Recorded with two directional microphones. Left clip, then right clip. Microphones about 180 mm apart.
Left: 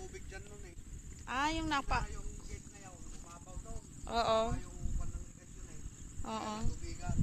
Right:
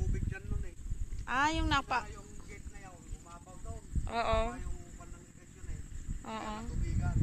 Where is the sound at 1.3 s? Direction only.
45° right (ahead or behind).